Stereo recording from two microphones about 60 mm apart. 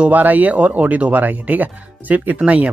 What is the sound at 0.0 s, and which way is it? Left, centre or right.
Speech, right.